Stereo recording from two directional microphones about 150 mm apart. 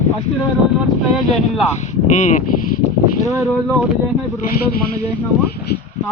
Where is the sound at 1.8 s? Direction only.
55° left (ahead or behind).